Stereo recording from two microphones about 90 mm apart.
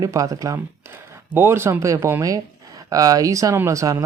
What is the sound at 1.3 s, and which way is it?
Speech, 30° right (ahead or behind).